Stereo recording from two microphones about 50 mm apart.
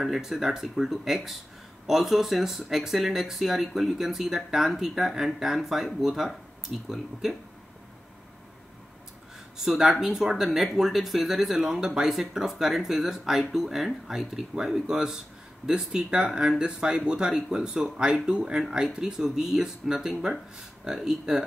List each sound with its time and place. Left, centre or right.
0.0 s speech: centre
9.6 s speech: centre